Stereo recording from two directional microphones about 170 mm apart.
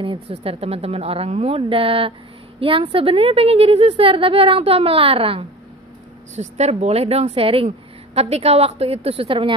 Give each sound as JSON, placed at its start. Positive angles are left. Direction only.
{"t": 0.0, "sound": "a woman's voice", "side_deg": -35}